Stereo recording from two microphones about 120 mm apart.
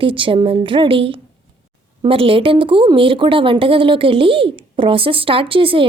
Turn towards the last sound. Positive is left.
turn(degrees=-50)  # may be behind; listen again after turning